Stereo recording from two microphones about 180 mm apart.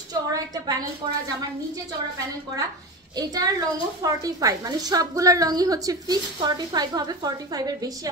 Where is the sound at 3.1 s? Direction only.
20° right (ahead or behind).